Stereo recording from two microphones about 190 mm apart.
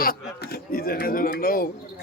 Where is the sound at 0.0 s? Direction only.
55° left (ahead or behind).